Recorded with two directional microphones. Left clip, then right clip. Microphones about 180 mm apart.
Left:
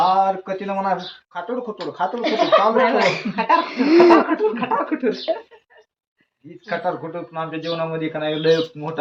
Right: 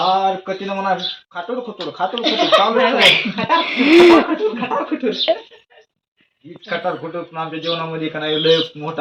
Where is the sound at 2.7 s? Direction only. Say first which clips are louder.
Right 4 dB; 10° left (ahead or behind).